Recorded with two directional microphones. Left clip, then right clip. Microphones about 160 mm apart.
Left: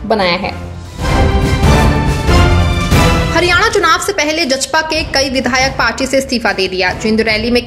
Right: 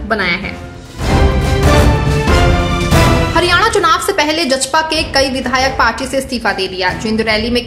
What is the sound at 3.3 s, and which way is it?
A woman's voice, 20° left (ahead or behind).